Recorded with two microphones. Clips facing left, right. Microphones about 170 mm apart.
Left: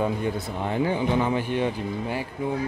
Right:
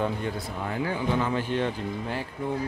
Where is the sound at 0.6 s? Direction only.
25° left (ahead or behind).